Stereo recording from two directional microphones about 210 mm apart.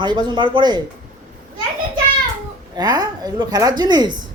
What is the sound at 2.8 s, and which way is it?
Speech, 20° right (ahead or behind).